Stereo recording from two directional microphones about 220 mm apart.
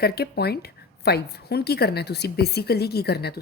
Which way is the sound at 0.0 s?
45° left (ahead or behind).